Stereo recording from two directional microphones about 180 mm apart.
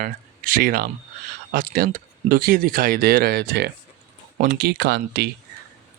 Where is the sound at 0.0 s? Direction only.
50° right (ahead or behind).